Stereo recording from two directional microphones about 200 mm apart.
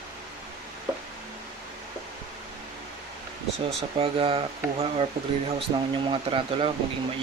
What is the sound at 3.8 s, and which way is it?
Speech, 30° right (ahead or behind).